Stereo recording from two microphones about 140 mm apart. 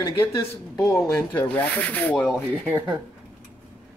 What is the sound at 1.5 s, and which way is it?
Rub, 10° left (ahead or behind).